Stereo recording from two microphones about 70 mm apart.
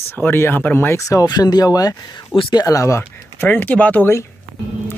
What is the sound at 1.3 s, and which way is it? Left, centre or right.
Speech, left.